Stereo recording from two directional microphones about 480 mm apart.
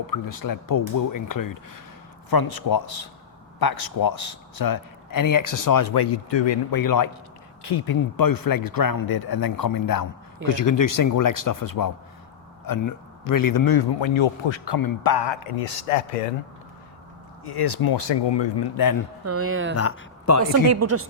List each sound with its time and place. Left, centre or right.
0.1 s speech: left
6.7 s speech: left
14.0 s a man's voice: left
17.4 s speech: left
19.2 s speech: right
19.7 s speech: left
20.4 s speech: right